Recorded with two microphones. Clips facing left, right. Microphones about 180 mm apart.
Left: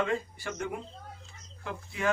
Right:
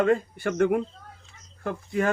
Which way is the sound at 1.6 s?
50° right (ahead or behind).